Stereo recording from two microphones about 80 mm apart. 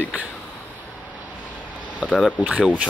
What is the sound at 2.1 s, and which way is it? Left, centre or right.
Speech, centre.